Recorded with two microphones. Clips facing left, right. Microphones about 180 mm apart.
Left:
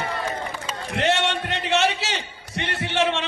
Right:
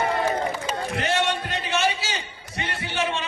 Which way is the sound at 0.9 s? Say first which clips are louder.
Left 4 dB; 65° left (ahead or behind).